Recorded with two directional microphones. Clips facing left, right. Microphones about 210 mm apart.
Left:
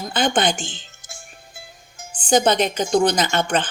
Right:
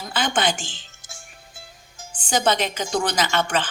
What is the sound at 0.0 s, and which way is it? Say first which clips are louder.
Speech: left 3 dB; 40° left (ahead or behind).